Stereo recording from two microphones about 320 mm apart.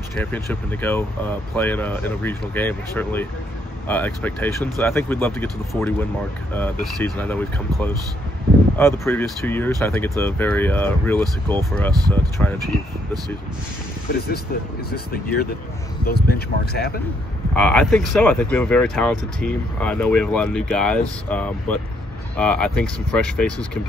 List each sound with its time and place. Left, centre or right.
0.1 s speech: centre
14.9 s speech: left
17.6 s speech: centre